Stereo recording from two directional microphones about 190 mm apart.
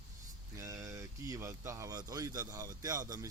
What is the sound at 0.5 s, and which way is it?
A man's voice, 15° right (ahead or behind).